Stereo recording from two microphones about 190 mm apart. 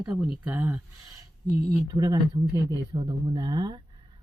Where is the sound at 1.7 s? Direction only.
20° right (ahead or behind).